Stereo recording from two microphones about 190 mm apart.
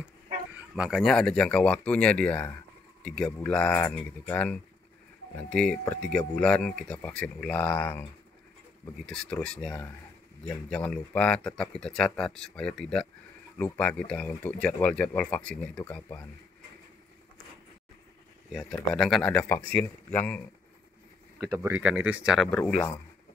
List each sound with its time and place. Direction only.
0.6 s speech: 5° right (ahead or behind)
18.5 s speech: centre (ahead or behind)
21.8 s speech: 5° right (ahead or behind)